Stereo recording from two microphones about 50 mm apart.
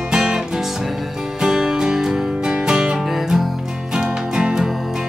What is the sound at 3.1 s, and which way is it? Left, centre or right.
Music, centre.